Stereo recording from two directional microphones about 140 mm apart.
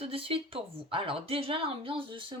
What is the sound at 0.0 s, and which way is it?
Speech, 40° right (ahead or behind).